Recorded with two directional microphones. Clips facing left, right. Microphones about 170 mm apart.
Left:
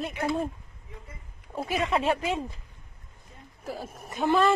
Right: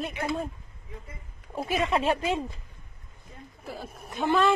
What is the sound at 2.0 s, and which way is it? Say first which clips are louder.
Speech: right 1 dB; 25° right (ahead or behind).